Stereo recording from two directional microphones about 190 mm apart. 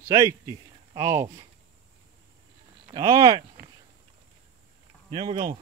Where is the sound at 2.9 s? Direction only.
20° right (ahead or behind).